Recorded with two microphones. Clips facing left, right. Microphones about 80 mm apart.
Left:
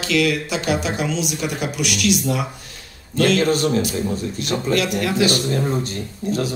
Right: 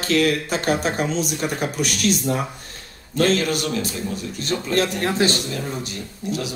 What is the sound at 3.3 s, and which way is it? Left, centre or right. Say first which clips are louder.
Speech: left 5 dB; left.